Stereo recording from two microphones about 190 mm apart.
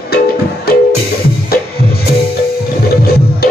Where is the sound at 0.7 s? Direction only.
55° left (ahead or behind).